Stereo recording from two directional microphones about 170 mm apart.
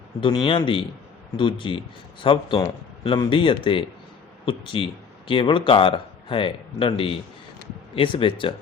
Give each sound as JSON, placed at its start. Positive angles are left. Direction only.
{"t": 0.2, "sound": "speech", "side_deg": 30}